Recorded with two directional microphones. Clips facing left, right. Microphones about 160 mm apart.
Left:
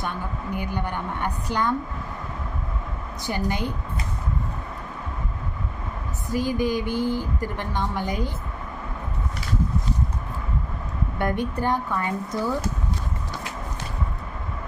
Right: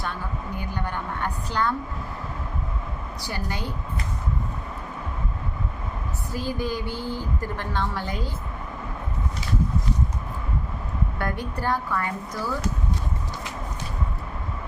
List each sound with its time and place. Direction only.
0.5 s a woman's voice: 15° left (ahead or behind)
3.2 s a woman's voice: 20° left (ahead or behind)
6.3 s a woman's voice: 15° left (ahead or behind)
11.2 s a woman's voice: 20° left (ahead or behind)